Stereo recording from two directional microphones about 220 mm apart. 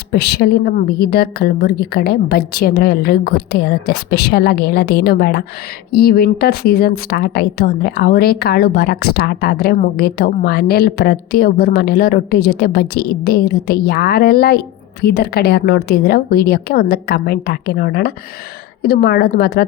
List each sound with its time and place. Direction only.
0.1 s a woman's voice: 45° left (ahead or behind)